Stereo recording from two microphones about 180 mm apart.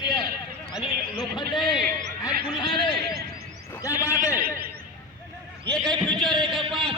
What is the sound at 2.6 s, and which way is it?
A man's voice, 25° left (ahead or behind).